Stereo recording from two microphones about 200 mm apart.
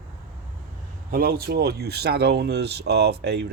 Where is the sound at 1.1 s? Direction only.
50° right (ahead or behind).